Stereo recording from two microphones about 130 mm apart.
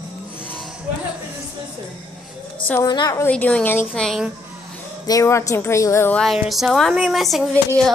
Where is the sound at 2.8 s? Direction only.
30° left (ahead or behind).